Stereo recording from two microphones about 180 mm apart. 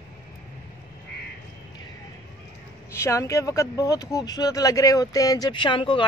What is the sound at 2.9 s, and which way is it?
Speech, 15° left (ahead or behind).